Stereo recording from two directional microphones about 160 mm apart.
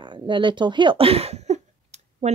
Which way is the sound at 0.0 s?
30° right (ahead or behind).